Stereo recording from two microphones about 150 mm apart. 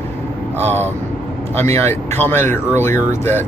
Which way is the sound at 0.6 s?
15° left (ahead or behind).